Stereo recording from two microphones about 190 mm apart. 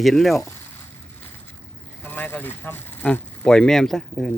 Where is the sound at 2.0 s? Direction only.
10° left (ahead or behind).